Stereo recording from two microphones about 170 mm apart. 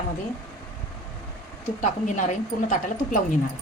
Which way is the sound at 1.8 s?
50° left (ahead or behind).